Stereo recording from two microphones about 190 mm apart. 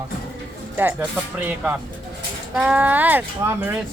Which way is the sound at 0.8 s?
10° right (ahead or behind).